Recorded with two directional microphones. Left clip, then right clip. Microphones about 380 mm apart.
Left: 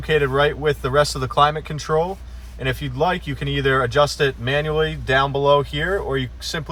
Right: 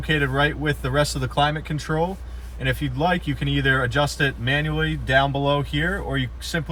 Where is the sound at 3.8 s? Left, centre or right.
Centre.